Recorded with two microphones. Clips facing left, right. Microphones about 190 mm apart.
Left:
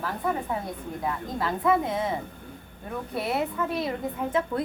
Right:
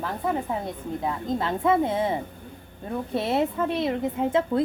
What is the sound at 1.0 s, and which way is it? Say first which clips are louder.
A woman's voice: right 2 dB; 25° right (ahead or behind).